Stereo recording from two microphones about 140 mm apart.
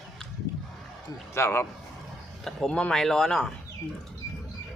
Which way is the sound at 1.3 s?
20° left (ahead or behind).